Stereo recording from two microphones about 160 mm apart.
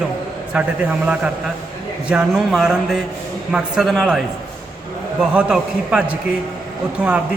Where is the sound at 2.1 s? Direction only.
5° right (ahead or behind).